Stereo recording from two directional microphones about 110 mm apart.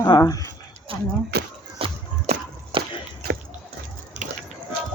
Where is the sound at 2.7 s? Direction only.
50° right (ahead or behind).